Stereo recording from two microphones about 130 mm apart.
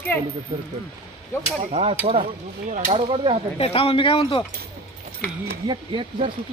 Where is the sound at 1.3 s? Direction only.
20° left (ahead or behind).